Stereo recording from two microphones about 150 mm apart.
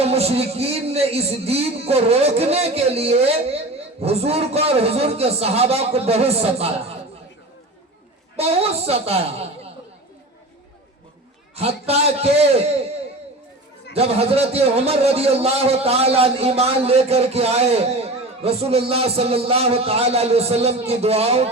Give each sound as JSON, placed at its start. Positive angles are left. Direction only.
{"t": 0.0, "sound": "a man's voice", "side_deg": -45}
{"t": 8.4, "sound": "a man's voice", "side_deg": -40}
{"t": 11.5, "sound": "a man's voice", "side_deg": -45}
{"t": 13.9, "sound": "a man's voice", "side_deg": -45}